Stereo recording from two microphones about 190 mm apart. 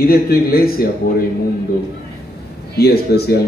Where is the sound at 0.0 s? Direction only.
50° left (ahead or behind).